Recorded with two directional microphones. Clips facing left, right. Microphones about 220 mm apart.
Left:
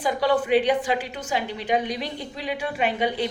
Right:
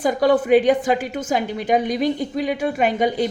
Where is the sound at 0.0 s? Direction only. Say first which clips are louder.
Right 5 dB; 45° right (ahead or behind).